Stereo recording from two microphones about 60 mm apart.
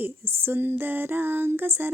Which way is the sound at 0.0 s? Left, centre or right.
Right.